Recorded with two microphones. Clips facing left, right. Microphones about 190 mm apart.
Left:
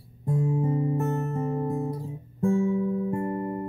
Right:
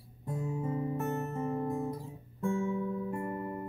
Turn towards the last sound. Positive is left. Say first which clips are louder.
# left 7 dB
turn(degrees=35)  # may be behind; listen again after turning